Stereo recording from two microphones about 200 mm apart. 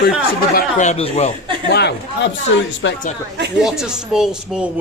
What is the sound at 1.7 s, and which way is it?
Speech, 55° left (ahead or behind).